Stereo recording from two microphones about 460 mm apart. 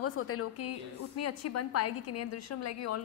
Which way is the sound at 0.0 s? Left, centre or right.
Left.